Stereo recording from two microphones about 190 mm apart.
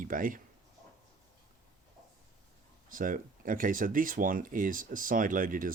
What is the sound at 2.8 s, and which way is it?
Speech, 45° right (ahead or behind).